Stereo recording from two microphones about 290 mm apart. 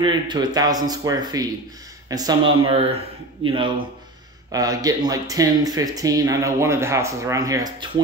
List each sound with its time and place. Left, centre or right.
0.0 s speech: centre